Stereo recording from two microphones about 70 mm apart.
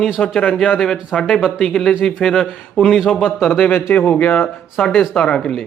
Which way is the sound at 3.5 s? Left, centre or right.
Left.